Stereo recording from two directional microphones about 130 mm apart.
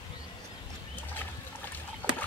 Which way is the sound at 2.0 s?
15° left (ahead or behind).